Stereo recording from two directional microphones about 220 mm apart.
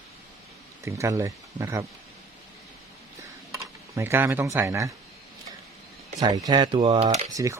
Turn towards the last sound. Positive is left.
turn(degrees=-15)  # may be behind; listen again after turning